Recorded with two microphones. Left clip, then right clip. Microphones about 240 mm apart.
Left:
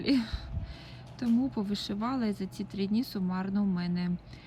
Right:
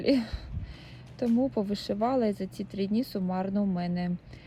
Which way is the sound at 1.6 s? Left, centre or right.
Centre.